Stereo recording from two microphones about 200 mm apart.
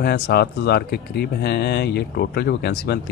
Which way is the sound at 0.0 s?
50° left (ahead or behind).